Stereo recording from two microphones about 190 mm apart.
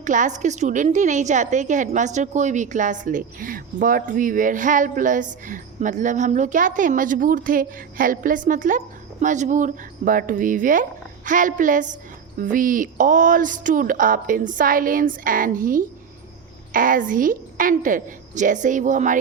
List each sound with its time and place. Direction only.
0.0 s a woman's voice: 40° right (ahead or behind)